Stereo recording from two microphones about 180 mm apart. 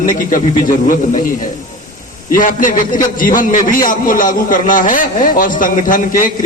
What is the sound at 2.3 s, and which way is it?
A man's voice, 50° left (ahead or behind).